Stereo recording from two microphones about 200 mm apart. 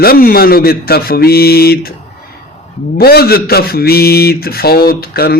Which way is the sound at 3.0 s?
50° left (ahead or behind).